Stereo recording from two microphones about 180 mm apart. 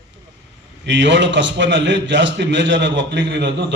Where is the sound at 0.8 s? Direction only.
85° right.